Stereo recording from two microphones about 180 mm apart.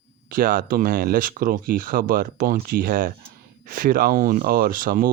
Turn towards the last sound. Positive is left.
turn(degrees=-50)  # may be behind; listen again after turning